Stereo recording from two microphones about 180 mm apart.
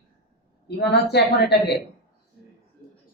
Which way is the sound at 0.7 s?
65° left (ahead or behind).